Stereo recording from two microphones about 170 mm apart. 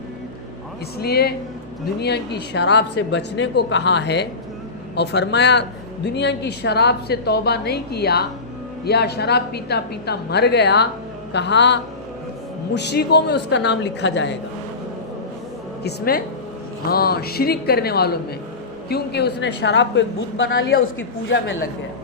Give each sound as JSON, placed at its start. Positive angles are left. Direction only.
{"t": 0.9, "sound": "a woman's voice", "side_deg": 70}
{"t": 12.7, "sound": "a woman's voice", "side_deg": 80}
{"t": 15.8, "sound": "a woman's voice", "side_deg": 75}